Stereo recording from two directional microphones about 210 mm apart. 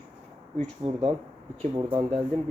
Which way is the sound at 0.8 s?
25° right (ahead or behind).